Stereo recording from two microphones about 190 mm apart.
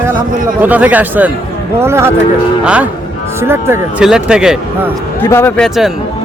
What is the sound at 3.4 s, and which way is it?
A man's voice, 10° right (ahead or behind).